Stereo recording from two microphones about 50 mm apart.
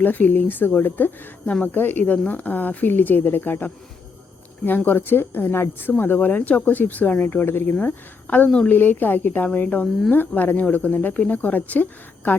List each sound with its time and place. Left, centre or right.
0.0 s speech: left
4.9 s speech: left
5.9 s speech: left
9.5 s speech: left